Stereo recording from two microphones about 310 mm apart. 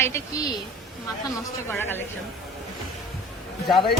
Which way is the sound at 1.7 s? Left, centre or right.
Centre.